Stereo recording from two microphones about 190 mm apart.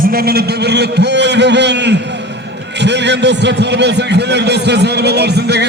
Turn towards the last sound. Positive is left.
turn(degrees=-60)  # may be behind; listen again after turning